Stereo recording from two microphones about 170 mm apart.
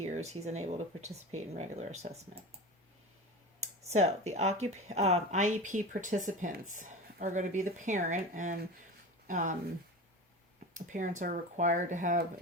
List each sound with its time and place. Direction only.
0.0 s speech: 40° right (ahead or behind)
3.6 s speech: 40° right (ahead or behind)
10.8 s speech: 50° right (ahead or behind)